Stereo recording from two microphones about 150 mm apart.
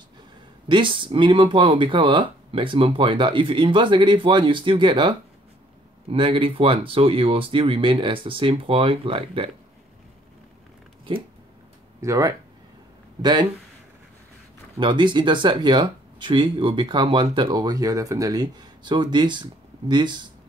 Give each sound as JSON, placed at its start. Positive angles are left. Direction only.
{"t": 0.7, "sound": "speech", "side_deg": -35}
{"t": 12.0, "sound": "speech", "side_deg": -20}
{"t": 14.8, "sound": "speech", "side_deg": -35}